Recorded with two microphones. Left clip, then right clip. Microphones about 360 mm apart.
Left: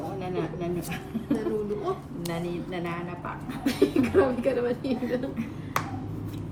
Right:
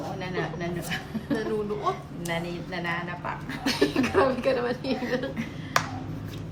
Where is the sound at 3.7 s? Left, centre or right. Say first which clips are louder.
Even; right.